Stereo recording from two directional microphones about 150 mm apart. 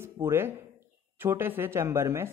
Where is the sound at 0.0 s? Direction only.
15° right (ahead or behind).